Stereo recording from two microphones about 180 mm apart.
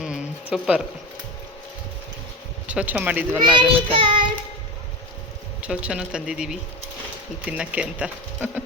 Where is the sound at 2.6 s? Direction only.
5° right (ahead or behind).